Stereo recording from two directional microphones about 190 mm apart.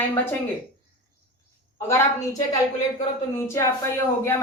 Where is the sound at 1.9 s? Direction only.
15° left (ahead or behind).